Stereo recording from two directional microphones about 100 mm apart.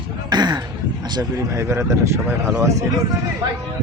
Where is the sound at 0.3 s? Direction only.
45° right (ahead or behind).